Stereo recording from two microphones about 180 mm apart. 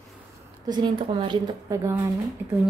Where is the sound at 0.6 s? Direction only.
25° right (ahead or behind).